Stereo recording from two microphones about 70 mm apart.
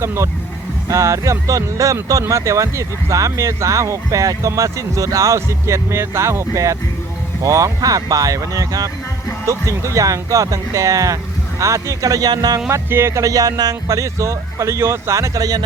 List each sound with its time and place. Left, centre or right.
0.0 s speech: right
12.7 s speech: right